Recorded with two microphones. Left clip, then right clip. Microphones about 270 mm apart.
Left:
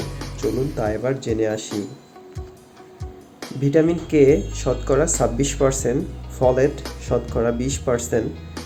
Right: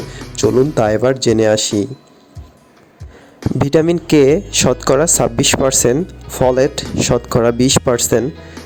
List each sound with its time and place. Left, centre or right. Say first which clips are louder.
0.3 s speech: right 11 dB; right
3.7 s speech: right 5 dB; right